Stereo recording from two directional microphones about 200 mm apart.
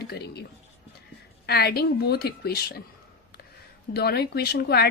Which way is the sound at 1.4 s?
50° left (ahead or behind).